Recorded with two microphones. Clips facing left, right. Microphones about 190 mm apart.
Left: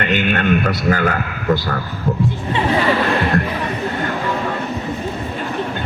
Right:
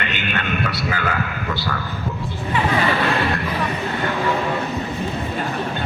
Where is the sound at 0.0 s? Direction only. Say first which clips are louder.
Left 8 dB; 45° left (ahead or behind).